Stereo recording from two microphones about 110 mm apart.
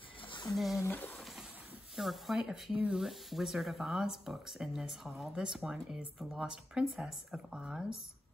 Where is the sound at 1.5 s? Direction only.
15° right (ahead or behind).